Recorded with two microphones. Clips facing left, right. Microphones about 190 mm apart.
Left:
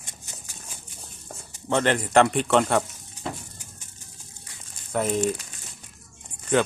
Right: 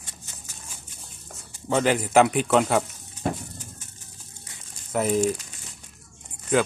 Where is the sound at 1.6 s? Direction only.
5° right (ahead or behind).